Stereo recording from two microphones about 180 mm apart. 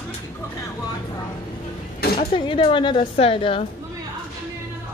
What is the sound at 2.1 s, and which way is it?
Speech, 30° left (ahead or behind).